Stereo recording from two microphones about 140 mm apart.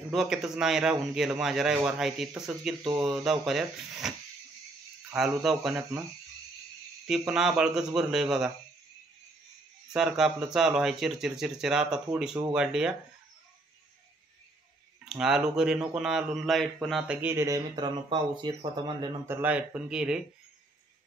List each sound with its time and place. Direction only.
0.1 s a man's voice: 5° right (ahead or behind)
5.1 s a man's voice: centre (ahead or behind)
7.1 s a man's voice: 5° right (ahead or behind)
9.9 s a man's voice: 5° right (ahead or behind)
15.0 s a man's voice: 5° right (ahead or behind)
17.2 s speech: 20° right (ahead or behind)
19.2 s speech: 15° right (ahead or behind)